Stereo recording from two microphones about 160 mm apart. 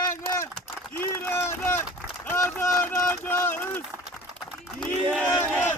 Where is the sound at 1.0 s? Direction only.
15° left (ahead or behind).